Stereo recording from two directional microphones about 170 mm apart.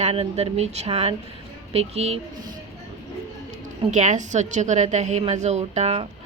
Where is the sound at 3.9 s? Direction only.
45° right (ahead or behind).